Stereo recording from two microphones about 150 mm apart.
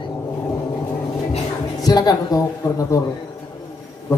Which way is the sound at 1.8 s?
25° left (ahead or behind).